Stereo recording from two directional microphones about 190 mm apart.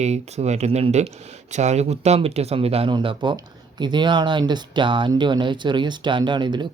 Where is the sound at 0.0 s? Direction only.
35° right (ahead or behind).